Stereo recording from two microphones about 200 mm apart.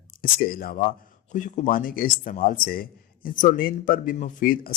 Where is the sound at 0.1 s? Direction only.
45° left (ahead or behind).